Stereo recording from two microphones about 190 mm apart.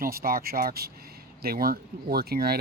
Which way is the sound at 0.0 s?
50° right (ahead or behind).